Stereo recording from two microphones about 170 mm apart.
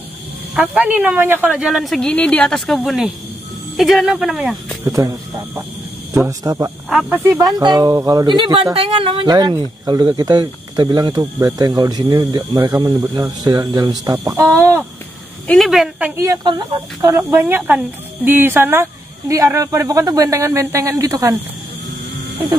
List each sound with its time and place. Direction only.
0.6 s a woman's voice: 10° right (ahead or behind)
4.8 s speech: 20° right (ahead or behind)
6.1 s speech: 15° right (ahead or behind)
6.9 s speech: 5° right (ahead or behind)
15.4 s a woman's voice: centre (ahead or behind)
16.2 s speech: 20° right (ahead or behind)